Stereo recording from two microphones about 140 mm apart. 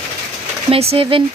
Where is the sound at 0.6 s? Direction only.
45° right (ahead or behind).